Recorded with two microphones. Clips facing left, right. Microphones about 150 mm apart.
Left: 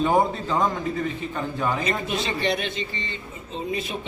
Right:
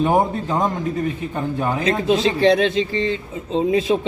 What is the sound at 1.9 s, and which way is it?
A man's voice, 90° right.